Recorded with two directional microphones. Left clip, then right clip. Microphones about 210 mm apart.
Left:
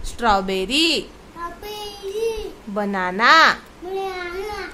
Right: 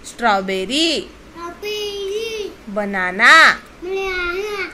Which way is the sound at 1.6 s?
20° left (ahead or behind).